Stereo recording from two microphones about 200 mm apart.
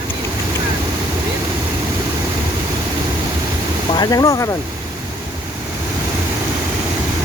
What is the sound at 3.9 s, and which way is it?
Speech, 20° left (ahead or behind).